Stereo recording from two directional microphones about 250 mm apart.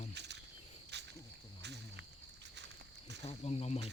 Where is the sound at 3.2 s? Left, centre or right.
Left.